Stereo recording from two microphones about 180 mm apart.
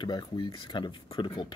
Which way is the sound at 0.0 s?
25° left (ahead or behind).